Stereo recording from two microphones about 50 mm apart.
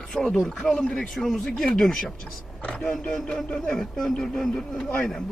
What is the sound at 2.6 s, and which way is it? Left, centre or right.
A man's voice, centre.